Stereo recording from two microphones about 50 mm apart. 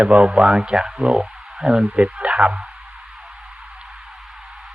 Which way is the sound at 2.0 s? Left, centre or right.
Right.